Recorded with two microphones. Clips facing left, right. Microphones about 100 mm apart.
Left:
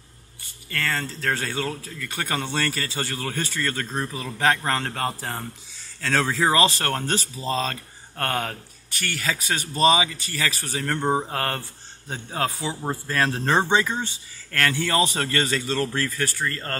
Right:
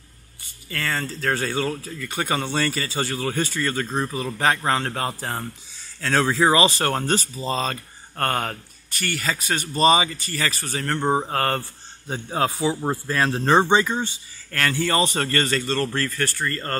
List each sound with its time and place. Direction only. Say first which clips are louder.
0.4 s speech: even; 5° right (ahead or behind)
12.3 s speech: right 5 dB; 20° right (ahead or behind)
13.0 s speech: even; 5° right (ahead or behind)